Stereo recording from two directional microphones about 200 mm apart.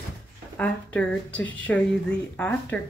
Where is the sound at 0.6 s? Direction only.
5° left (ahead or behind).